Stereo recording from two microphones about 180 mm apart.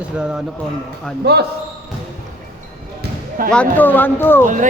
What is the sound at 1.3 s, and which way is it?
Speech, 65° right (ahead or behind).